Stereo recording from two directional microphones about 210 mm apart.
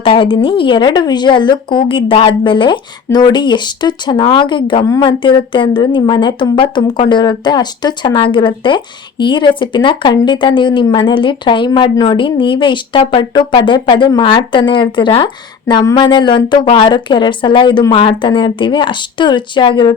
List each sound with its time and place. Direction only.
0.0 s speech: 25° left (ahead or behind)